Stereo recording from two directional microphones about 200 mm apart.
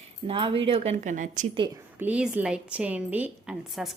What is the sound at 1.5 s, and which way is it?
Speech, 25° right (ahead or behind).